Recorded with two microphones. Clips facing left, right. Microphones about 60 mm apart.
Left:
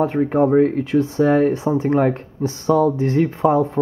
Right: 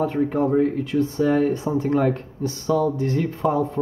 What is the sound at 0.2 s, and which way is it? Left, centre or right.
Speech, left.